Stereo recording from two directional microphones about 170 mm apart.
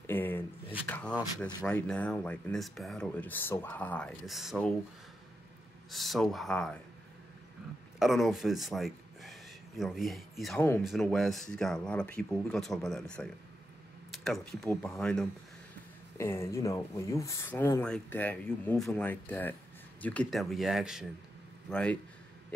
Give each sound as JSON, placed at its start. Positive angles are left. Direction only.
{"t": 0.0, "sound": "a sound", "side_deg": 10}
{"t": 0.8, "sound": "speech", "side_deg": 10}
{"t": 5.9, "sound": "speech", "side_deg": 0}
{"t": 8.0, "sound": "a man's voice", "side_deg": 0}